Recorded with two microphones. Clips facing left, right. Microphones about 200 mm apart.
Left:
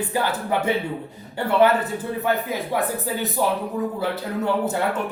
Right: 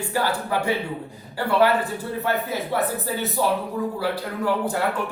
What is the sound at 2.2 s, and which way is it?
Speech, 15° left (ahead or behind).